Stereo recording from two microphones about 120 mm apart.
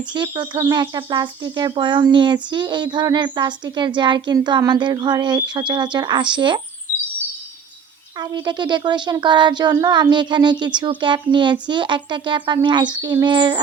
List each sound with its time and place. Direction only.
0.1 s speech: 40° right (ahead or behind)
8.2 s speech: 35° right (ahead or behind)